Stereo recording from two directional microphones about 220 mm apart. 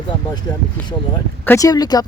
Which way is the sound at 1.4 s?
15° left (ahead or behind).